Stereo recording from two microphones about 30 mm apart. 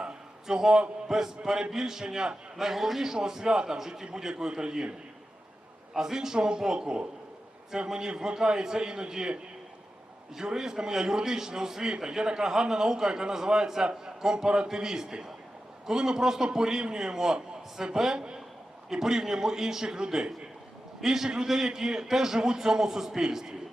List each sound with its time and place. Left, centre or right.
0.4 s a man's voice: centre
2.6 s a man's voice: centre
3.2 s a man's voice: right
3.8 s a man's voice: centre
5.9 s a man's voice: centre
10.4 s a man's voice: centre